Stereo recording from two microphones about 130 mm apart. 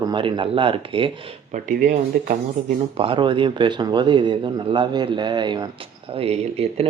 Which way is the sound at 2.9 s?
45° right (ahead or behind).